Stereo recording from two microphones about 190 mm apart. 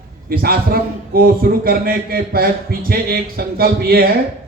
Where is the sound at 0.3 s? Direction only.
50° right (ahead or behind).